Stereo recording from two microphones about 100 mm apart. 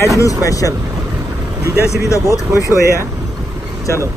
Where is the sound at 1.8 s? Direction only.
30° left (ahead or behind).